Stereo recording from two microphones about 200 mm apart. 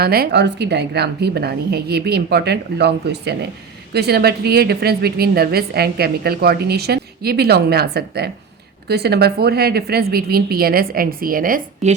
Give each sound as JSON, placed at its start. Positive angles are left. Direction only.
{"t": 0.0, "sound": "a woman's voice", "side_deg": -50}